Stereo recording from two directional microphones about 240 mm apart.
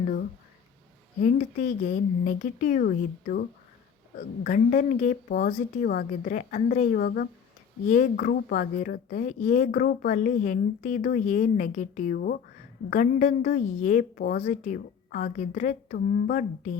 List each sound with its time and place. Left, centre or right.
1.2 s a woman's voice: left